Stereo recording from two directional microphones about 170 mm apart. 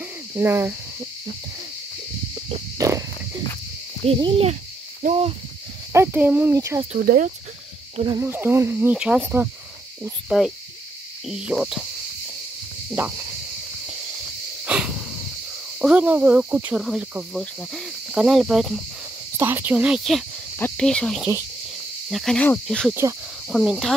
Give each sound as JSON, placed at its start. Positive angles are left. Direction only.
{"t": 0.4, "sound": "cricket", "side_deg": -10}
{"t": 2.8, "sound": "cricket", "side_deg": -20}
{"t": 4.0, "sound": "speech", "side_deg": -35}
{"t": 5.0, "sound": "speech", "side_deg": -55}
{"t": 5.9, "sound": "cricket", "side_deg": -10}
{"t": 7.0, "sound": "cricket", "side_deg": -60}
{"t": 8.2, "sound": "cricket", "side_deg": -10}
{"t": 10.3, "sound": "speech", "side_deg": -5}
{"t": 14.7, "sound": "a sound", "side_deg": -5}
{"t": 15.8, "sound": "cricket", "side_deg": -5}
{"t": 19.3, "sound": "cricket", "side_deg": -15}
{"t": 20.5, "sound": "speech", "side_deg": 5}